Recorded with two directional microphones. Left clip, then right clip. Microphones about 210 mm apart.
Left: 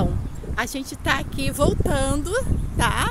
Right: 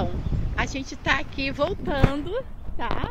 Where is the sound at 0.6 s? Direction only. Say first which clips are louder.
Left 2 dB; 25° left (ahead or behind).